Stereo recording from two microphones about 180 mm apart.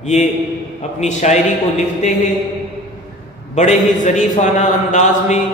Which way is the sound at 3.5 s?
40° left (ahead or behind).